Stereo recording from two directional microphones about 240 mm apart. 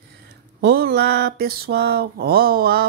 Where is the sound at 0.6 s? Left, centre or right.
Right.